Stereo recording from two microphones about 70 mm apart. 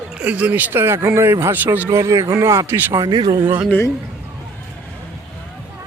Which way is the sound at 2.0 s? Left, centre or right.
Right.